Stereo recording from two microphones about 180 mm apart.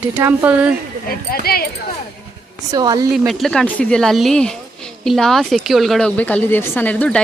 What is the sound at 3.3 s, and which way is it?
A woman's voice, centre (ahead or behind).